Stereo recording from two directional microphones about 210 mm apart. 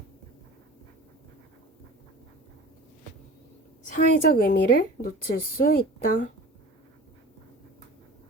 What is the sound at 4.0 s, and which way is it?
Speech, 40° left (ahead or behind).